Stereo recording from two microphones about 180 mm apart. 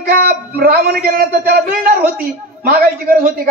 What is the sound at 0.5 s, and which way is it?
A man's voice, 55° right (ahead or behind).